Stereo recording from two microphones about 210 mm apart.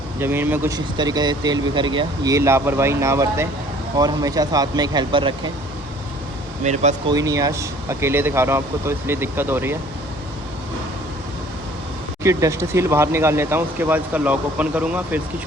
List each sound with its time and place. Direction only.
0.2 s speech: 10° right (ahead or behind)
6.6 s speech: 35° right (ahead or behind)
7.1 s speech: 15° right (ahead or behind)
12.2 s speech: 15° right (ahead or behind)